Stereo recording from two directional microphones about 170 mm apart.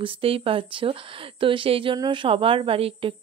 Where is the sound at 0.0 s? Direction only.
35° right (ahead or behind).